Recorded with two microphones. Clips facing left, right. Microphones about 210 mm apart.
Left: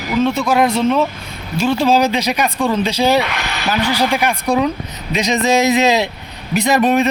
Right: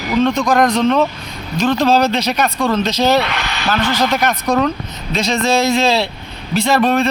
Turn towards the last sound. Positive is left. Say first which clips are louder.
# even
turn(degrees=15)  # may be behind; listen again after turning